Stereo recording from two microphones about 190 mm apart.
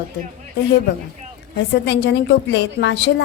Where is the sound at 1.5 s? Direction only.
65° left (ahead or behind).